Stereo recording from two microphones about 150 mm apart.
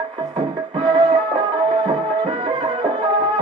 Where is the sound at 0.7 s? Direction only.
35° right (ahead or behind).